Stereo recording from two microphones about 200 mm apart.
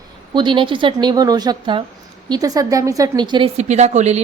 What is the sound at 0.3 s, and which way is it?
Speech, 25° right (ahead or behind).